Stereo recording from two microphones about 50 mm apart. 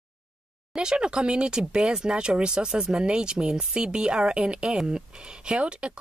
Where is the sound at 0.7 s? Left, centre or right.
Centre.